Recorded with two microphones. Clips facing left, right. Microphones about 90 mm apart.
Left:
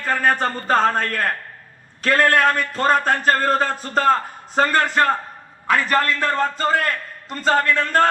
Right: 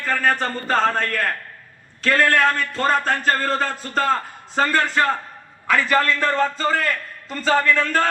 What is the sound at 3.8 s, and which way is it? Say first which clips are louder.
Music: left 3 dB; 35° left (ahead or behind).